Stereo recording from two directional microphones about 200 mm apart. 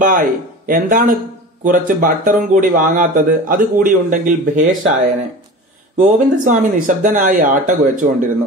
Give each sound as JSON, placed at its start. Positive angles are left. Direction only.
{"t": 0.0, "sound": "speech", "side_deg": -45}
{"t": 5.9, "sound": "speech", "side_deg": -40}